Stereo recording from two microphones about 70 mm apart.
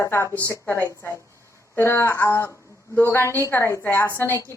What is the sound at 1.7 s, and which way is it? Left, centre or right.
A woman's voice, left.